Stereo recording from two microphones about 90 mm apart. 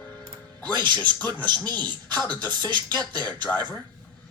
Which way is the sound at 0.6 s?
55° right (ahead or behind).